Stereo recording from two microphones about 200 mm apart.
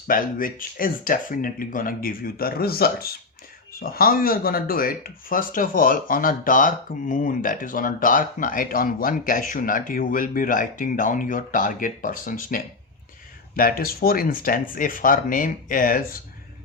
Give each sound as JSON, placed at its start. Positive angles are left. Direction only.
{"t": 0.1, "sound": "speech", "side_deg": 45}